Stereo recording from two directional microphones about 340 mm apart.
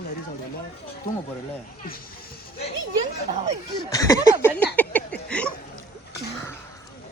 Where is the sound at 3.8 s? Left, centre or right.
Centre.